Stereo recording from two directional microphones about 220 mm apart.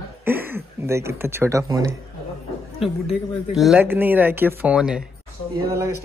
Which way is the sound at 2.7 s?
Centre (ahead or behind).